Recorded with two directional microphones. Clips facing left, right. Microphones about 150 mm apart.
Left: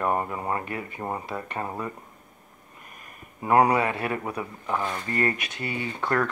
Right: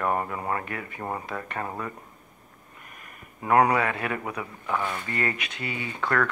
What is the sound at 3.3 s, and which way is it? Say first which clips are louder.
Speech: left 1 dB; 25° left (ahead or behind).